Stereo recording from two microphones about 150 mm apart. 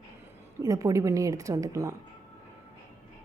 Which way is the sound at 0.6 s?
25° right (ahead or behind).